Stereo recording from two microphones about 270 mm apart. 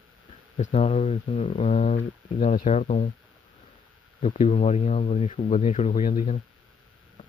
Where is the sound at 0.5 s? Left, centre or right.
Left.